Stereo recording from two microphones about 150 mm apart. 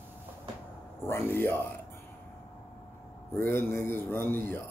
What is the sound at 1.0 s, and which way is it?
Speech, 15° left (ahead or behind).